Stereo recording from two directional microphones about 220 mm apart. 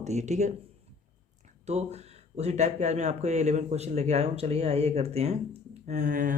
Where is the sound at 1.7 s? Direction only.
30° right (ahead or behind).